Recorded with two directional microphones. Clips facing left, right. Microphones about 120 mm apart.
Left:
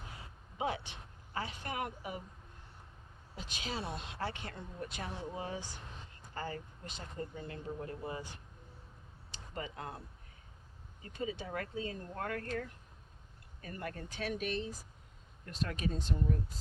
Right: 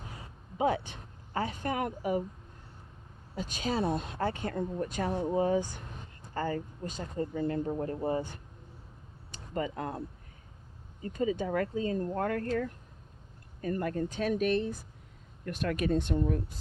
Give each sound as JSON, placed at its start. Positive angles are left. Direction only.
{"t": 0.6, "sound": "speech", "side_deg": -45}
{"t": 3.3, "sound": "speech", "side_deg": -45}
{"t": 11.0, "sound": "speech", "side_deg": -40}